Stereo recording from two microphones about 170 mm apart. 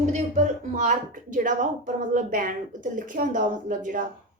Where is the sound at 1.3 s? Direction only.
50° right (ahead or behind).